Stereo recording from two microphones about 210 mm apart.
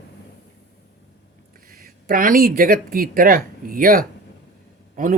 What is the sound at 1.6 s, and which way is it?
Speech, 45° right (ahead or behind).